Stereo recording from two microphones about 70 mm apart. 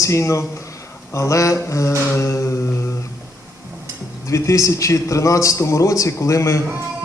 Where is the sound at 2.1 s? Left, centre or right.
Left.